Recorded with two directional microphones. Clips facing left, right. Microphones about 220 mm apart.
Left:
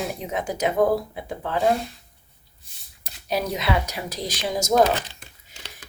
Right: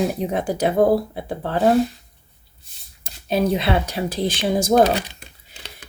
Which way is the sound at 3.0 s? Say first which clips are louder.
Right 6 dB; 25° right (ahead or behind).